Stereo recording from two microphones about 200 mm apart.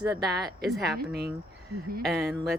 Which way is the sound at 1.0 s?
50° right (ahead or behind).